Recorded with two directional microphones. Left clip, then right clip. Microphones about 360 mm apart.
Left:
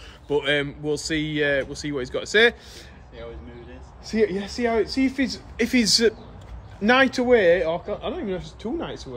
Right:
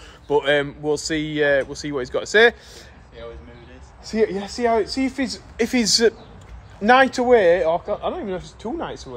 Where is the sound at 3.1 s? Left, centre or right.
Centre.